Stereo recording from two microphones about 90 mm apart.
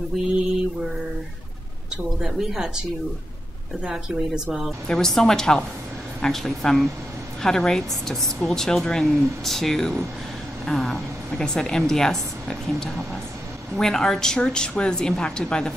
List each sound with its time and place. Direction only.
0.2 s speech: centre (ahead or behind)
2.1 s speech: 5° right (ahead or behind)
3.8 s a woman's voice: centre (ahead or behind)